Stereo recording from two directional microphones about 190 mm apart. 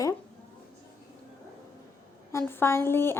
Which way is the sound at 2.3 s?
15° left (ahead or behind).